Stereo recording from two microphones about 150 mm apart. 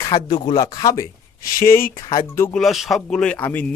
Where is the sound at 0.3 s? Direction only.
30° left (ahead or behind).